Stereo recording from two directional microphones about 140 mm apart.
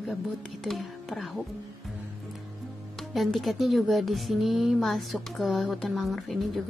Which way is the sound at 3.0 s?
Centre (ahead or behind).